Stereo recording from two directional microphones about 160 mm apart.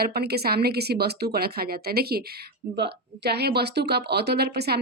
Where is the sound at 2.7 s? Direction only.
90° right.